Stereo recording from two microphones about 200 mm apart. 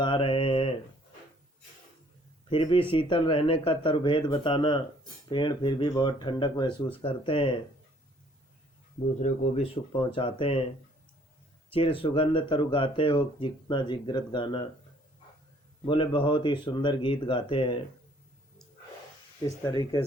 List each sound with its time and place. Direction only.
0.0 s mantra: 25° left (ahead or behind)
2.5 s speech: 25° left (ahead or behind)
9.2 s speech: 35° left (ahead or behind)
11.7 s speech: 25° left (ahead or behind)
15.9 s speech: 25° left (ahead or behind)
19.5 s speech: 20° left (ahead or behind)